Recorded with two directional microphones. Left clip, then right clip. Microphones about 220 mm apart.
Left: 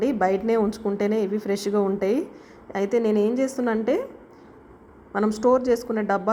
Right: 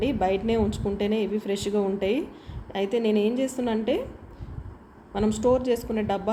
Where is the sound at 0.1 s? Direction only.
5° left (ahead or behind).